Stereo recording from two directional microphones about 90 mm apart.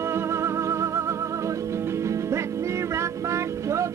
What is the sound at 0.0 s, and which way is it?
Music, 30° right (ahead or behind).